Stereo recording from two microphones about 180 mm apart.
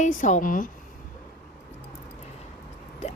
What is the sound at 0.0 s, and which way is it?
Speech, 45° left (ahead or behind).